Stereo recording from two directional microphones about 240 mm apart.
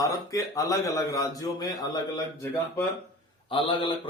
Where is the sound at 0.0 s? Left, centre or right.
Centre.